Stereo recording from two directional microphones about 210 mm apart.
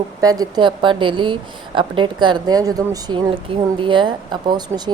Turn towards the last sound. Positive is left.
turn(degrees=-20)  # may be behind; listen again after turning